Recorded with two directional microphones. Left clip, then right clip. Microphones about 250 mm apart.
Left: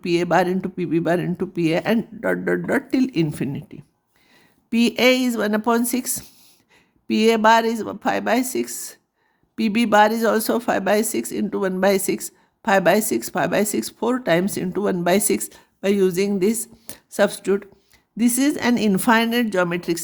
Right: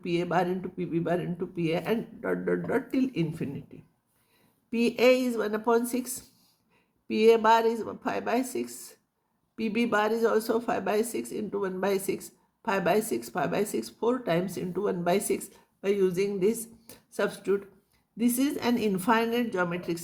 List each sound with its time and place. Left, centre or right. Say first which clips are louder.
0.0 s speech: left 9 dB; left